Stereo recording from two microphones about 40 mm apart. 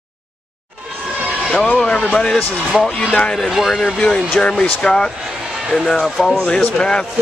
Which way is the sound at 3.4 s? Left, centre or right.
Centre.